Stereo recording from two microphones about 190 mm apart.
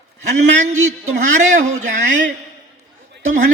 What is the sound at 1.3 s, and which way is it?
Speech, 40° right (ahead or behind).